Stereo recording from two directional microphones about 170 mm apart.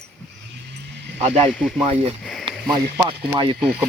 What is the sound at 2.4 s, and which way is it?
Speech, 25° right (ahead or behind).